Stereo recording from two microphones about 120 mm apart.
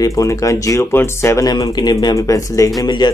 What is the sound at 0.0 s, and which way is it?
Speech, 25° left (ahead or behind).